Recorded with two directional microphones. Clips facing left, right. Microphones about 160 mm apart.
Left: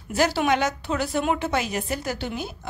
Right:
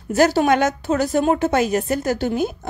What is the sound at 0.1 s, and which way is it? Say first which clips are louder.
A woman's voice: right 6 dB; 45° right (ahead or behind).